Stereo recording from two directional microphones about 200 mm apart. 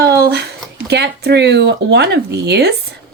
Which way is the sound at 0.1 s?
55° right (ahead or behind).